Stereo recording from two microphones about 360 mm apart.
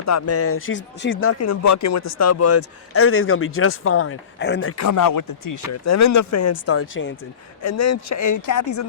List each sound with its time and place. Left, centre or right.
0.0 s speech: left
4.8 s speech: left
5.8 s speech: left